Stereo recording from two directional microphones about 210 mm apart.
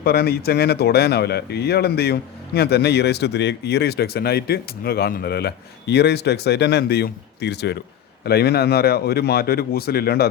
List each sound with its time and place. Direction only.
0.0 s speech: 50° left (ahead or behind)